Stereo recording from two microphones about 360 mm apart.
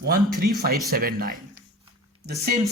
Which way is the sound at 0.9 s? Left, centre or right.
Right.